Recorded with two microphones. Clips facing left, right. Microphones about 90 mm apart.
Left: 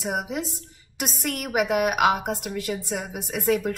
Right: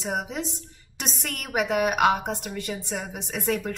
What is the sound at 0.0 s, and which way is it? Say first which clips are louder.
A woman's voice: left 1 dB; 5° left (ahead or behind).